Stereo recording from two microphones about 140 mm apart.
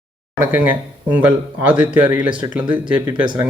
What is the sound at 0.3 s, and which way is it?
Speech, 10° right (ahead or behind).